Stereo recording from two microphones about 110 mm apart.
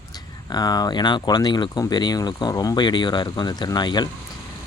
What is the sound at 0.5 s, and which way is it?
Speech, 40° left (ahead or behind).